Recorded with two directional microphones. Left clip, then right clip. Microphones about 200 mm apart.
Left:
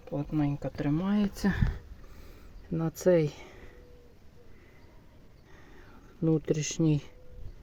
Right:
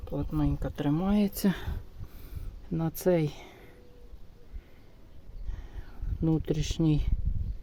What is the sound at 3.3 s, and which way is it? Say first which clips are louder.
Speech: even; 15° right (ahead or behind).